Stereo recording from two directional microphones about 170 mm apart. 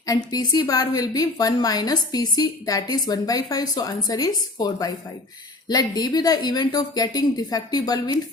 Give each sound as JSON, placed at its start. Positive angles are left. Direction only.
{"t": 0.0, "sound": "a woman's voice", "side_deg": 20}